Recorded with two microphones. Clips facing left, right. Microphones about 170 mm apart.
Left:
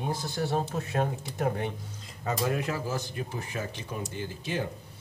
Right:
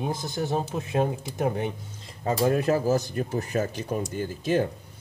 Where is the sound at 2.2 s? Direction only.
35° right (ahead or behind).